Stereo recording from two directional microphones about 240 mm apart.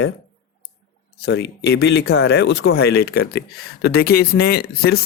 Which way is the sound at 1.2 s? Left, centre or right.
Left.